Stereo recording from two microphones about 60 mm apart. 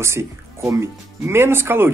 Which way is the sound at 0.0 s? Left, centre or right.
Right.